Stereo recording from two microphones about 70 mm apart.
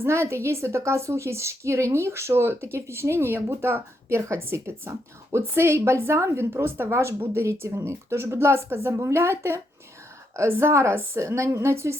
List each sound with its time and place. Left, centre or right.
0.0 s a woman's voice: right